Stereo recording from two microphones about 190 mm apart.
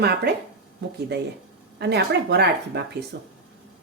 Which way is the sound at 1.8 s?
60° right (ahead or behind).